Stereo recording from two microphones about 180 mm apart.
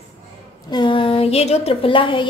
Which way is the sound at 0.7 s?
30° left (ahead or behind).